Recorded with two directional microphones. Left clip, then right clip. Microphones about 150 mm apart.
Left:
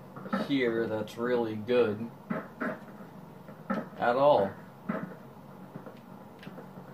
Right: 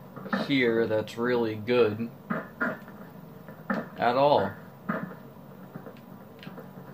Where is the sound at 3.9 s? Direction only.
70° right (ahead or behind).